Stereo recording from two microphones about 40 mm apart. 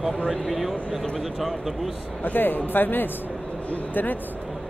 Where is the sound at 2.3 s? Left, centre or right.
Left.